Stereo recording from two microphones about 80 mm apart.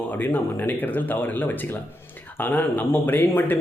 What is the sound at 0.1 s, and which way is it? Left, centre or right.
Speech, left.